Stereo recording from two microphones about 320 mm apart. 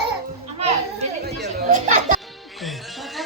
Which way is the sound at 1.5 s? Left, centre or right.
Right.